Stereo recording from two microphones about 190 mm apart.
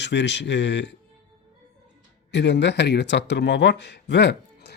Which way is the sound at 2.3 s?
65° left (ahead or behind).